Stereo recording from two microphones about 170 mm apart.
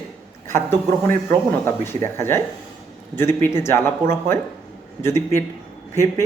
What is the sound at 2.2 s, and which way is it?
Speech, 15° left (ahead or behind).